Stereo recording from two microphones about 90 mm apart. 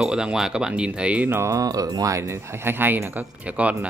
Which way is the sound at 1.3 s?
40° right (ahead or behind).